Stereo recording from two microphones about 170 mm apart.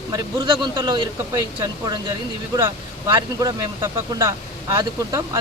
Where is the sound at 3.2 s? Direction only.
20° right (ahead or behind).